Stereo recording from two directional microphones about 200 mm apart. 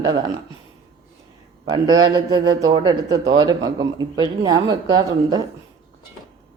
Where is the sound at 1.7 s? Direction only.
20° right (ahead or behind).